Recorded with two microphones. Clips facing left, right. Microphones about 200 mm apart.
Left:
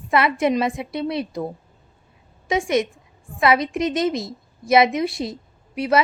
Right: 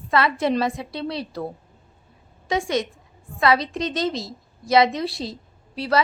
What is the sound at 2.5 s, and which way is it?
A woman's voice, 20° left (ahead or behind).